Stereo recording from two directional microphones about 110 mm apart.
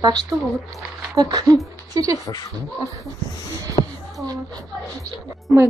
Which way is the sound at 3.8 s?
65° left (ahead or behind).